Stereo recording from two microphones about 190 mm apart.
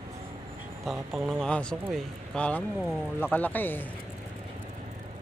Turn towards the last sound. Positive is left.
turn(degrees=10)  # may be behind; listen again after turning